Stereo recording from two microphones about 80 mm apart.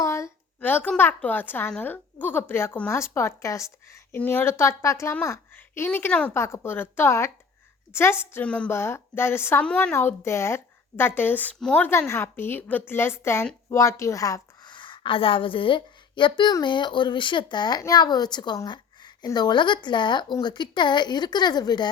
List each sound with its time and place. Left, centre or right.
0.0 s a sound: left
0.6 s a woman's voice: left
4.2 s speech: left
5.5 s a woman's voice: left
8.4 s a woman's voice: centre
8.7 s speech: left
9.6 s a woman's voice: centre
9.9 s a woman's voice: left
14.7 s a woman's voice: left
17.7 s speech: left